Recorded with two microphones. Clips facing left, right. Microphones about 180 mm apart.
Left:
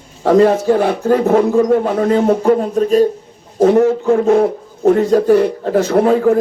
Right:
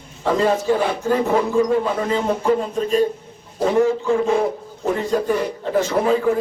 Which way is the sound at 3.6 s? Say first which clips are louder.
Left 6 dB; 55° left (ahead or behind).